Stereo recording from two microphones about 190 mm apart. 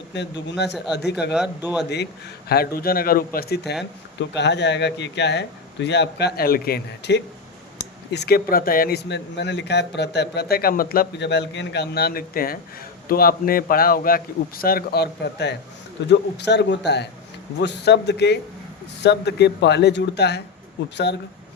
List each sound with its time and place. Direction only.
0.1 s speech: 65° left (ahead or behind)
1.3 s speech: 5° right (ahead or behind)
2.5 s a man's voice: 55° left (ahead or behind)